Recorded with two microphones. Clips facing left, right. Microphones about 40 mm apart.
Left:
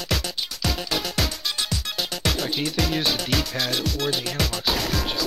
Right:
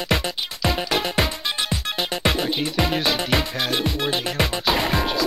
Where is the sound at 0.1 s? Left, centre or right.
Right.